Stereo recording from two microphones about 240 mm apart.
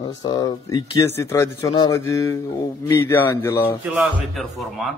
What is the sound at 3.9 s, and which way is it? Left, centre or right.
A man's voice, centre.